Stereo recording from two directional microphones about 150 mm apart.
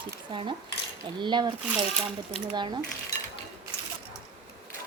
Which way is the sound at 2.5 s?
30° right (ahead or behind).